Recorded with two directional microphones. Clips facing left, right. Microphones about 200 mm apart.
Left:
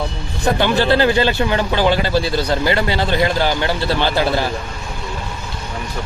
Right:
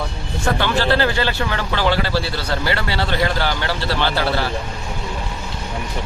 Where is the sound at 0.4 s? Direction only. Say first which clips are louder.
Left 3 dB; 15° left (ahead or behind).